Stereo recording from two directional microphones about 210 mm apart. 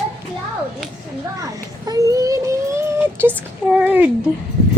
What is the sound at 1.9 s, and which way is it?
Child singing, 15° right (ahead or behind).